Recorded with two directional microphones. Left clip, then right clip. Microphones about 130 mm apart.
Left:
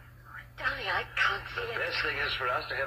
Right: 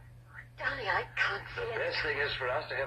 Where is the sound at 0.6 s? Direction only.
25° left (ahead or behind).